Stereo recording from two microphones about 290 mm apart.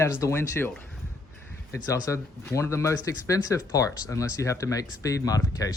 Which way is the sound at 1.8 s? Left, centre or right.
Centre.